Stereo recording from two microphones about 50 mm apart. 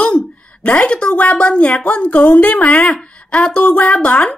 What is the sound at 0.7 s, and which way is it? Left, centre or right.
A woman's voice, left.